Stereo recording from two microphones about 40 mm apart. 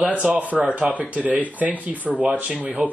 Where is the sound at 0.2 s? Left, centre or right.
Right.